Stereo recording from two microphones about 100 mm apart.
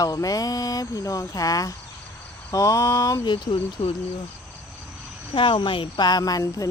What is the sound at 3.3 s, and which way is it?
Speech, 55° left (ahead or behind).